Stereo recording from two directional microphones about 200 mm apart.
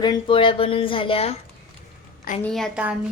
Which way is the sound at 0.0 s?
25° left (ahead or behind).